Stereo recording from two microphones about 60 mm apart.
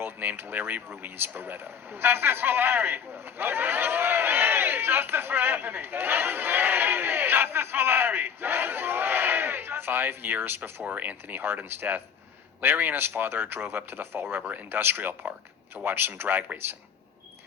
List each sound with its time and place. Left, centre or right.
0.0 s speech: right